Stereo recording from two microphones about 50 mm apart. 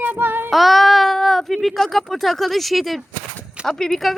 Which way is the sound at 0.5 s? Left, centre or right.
Centre.